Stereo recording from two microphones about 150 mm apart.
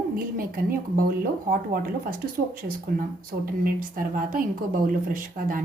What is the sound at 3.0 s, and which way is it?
A woman's voice, 70° right (ahead or behind).